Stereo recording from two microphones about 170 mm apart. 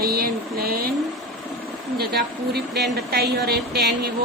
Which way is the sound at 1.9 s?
70° right (ahead or behind).